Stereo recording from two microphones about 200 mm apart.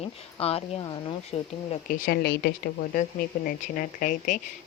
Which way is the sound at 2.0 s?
50° left (ahead or behind).